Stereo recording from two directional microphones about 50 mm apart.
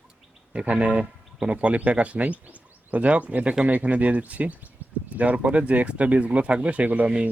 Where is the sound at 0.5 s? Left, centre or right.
Right.